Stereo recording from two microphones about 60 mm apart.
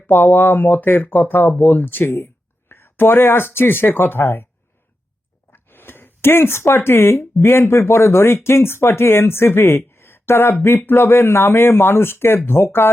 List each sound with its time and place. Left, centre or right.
0.1 s speech: left
5.5 s speech: left